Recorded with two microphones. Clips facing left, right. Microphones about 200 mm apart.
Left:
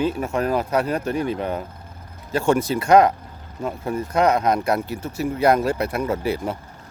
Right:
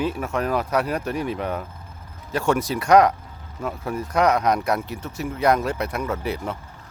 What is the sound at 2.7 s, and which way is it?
Speech, centre (ahead or behind).